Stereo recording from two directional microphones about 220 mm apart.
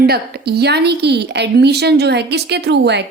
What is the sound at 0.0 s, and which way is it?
Speech, 45° right (ahead or behind).